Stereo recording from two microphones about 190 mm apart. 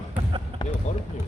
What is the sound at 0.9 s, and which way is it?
Speech, 40° left (ahead or behind).